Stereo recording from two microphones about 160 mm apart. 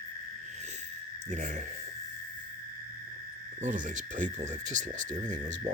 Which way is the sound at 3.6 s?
55° right (ahead or behind).